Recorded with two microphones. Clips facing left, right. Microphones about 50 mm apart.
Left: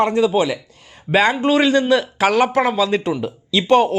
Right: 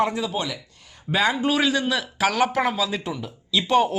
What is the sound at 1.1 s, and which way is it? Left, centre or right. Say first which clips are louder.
Speech: left 6 dB; left.